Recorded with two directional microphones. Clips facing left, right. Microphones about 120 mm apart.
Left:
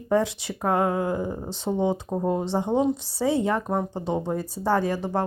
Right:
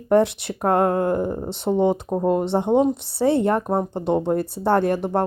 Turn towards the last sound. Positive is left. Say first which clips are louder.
# right 5 dB
turn(degrees=-60)  # may be behind; listen again after turning